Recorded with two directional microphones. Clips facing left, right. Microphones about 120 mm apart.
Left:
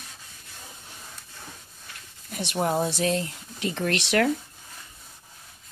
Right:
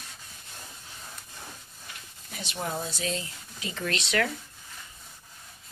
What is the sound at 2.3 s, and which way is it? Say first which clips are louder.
Speech: left 8 dB; 55° left (ahead or behind).